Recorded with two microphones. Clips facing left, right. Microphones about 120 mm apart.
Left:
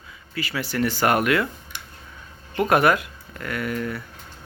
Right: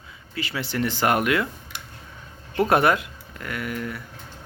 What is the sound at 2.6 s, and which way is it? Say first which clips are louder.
Speech: left 1 dB; 30° right (ahead or behind).